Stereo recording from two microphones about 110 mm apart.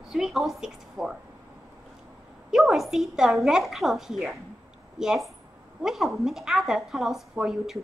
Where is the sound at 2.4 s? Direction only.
Centre (ahead or behind).